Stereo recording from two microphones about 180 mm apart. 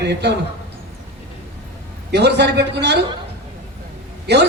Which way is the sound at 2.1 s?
70° right (ahead or behind).